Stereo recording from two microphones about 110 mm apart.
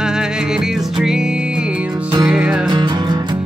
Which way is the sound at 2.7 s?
45° right (ahead or behind).